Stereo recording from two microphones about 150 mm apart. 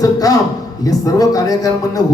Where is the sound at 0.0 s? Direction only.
25° left (ahead or behind).